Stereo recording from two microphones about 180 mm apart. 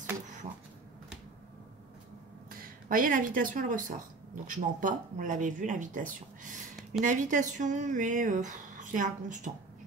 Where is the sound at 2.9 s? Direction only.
50° right (ahead or behind).